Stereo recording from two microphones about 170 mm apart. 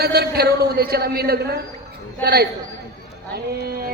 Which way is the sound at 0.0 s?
70° right (ahead or behind).